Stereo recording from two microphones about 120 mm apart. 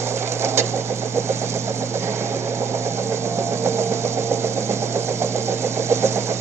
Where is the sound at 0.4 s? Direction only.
20° right (ahead or behind).